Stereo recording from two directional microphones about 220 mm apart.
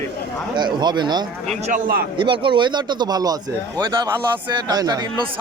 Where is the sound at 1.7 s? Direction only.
40° right (ahead or behind).